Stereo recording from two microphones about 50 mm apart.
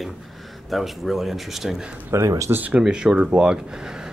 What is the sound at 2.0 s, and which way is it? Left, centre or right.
Speech, right.